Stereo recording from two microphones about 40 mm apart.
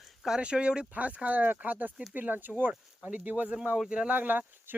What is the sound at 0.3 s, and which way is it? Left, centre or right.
Speech, right.